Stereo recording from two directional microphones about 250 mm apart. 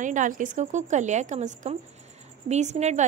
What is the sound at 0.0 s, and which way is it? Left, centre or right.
A woman's voice, right.